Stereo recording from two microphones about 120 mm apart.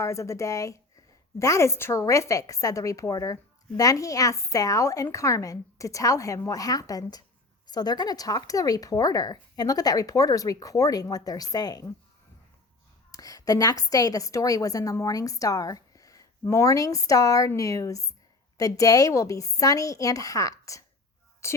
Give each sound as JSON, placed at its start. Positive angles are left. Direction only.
{"t": 0.0, "sound": "a woman's voice", "side_deg": 25}
{"t": 13.1, "sound": "a woman's voice", "side_deg": 30}